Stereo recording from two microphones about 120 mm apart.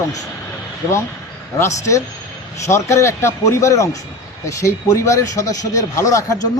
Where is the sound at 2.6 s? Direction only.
25° left (ahead or behind).